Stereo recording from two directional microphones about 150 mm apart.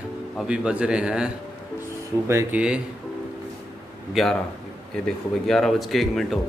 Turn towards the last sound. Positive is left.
turn(degrees=0)  # may be behind; listen again after turning